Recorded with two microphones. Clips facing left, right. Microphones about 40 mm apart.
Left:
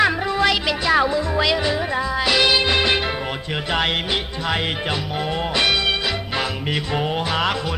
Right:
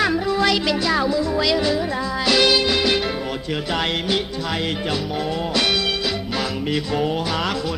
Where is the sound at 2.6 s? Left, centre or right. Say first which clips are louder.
Left 1 dB; left.